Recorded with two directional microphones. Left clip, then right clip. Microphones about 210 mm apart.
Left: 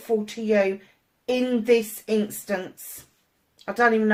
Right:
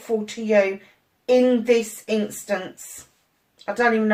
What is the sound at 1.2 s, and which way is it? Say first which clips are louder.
Speech: right 6 dB; 40° left (ahead or behind).